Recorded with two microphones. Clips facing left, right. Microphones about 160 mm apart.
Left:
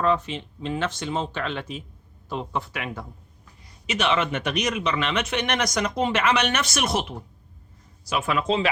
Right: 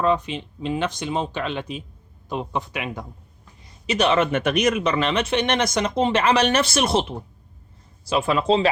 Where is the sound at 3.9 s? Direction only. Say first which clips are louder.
Right 4 dB; 40° right (ahead or behind).